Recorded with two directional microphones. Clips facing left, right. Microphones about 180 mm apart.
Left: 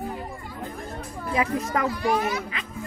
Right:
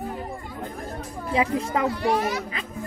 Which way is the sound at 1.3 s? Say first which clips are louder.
Right 2 dB; 25° right (ahead or behind).